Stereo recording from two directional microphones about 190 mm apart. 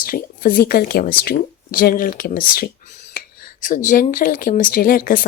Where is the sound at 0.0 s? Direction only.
50° left (ahead or behind).